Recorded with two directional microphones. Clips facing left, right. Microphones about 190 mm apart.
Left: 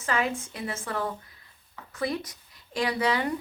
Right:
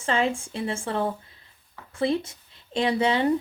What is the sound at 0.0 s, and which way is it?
Speech, 30° right (ahead or behind).